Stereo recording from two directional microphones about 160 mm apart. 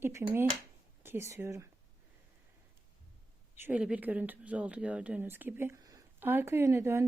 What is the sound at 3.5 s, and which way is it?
Speech, 10° right (ahead or behind).